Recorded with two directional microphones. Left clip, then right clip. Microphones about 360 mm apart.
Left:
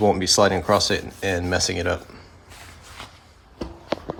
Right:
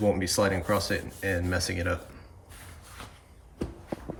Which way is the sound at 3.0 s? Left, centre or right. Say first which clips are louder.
Left 6 dB; centre.